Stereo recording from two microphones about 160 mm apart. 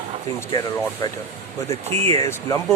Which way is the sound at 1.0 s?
25° left (ahead or behind).